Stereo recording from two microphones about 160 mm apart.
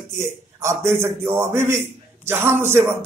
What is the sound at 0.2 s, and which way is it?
A man's voice, 15° right (ahead or behind).